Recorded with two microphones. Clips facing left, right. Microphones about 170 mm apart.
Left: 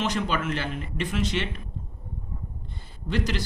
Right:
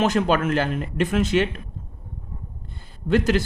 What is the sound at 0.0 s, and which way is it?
Speech, 45° right (ahead or behind).